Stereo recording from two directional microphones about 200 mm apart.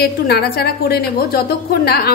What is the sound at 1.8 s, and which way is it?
Speech, 50° left (ahead or behind).